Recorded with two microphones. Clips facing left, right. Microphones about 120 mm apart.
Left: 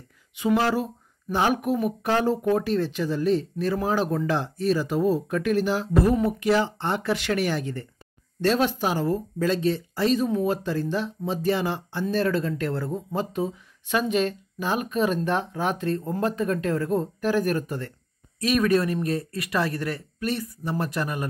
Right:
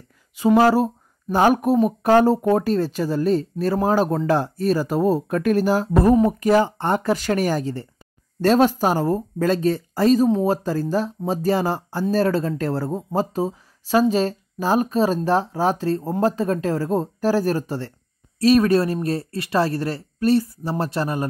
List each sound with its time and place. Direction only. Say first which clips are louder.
0.4 s speech: right 7 dB; 40° right (ahead or behind)